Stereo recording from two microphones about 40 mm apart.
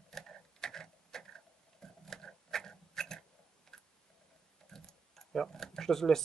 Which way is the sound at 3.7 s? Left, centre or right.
Centre.